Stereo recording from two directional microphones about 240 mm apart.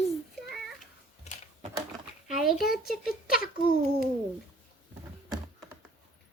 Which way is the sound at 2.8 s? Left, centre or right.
Left.